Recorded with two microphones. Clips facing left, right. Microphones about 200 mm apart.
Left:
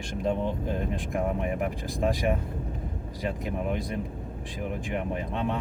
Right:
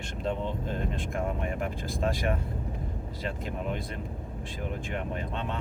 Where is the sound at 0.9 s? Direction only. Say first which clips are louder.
Left 3 dB; 15° left (ahead or behind).